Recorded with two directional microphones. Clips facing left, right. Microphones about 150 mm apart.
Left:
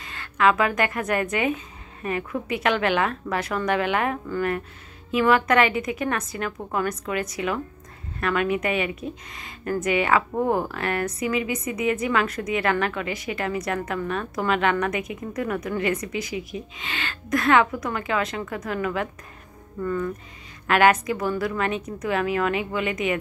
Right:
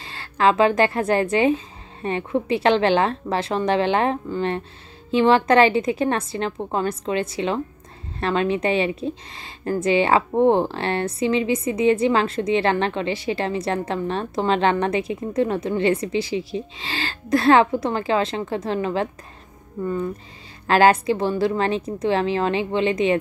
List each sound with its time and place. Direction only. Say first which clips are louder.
0.0 s speech: right 2 dB; 30° right (ahead or behind)